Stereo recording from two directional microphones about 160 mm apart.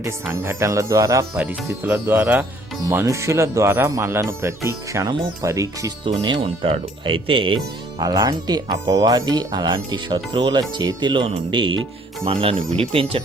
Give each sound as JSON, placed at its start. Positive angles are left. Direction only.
{"t": 0.0, "sound": "speech", "side_deg": -20}
{"t": 6.1, "sound": "speech", "side_deg": -35}